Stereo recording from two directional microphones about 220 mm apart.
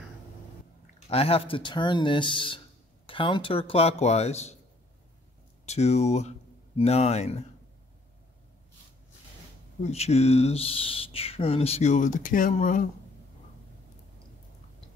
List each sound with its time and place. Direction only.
1.0 s speech: 25° left (ahead or behind)
5.7 s speech: 30° left (ahead or behind)
9.8 s speech: 30° left (ahead or behind)